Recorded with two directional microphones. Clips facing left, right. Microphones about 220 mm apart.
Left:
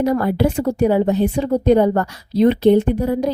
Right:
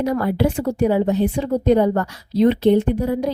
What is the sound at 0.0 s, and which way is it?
A woman's voice, 45° left (ahead or behind).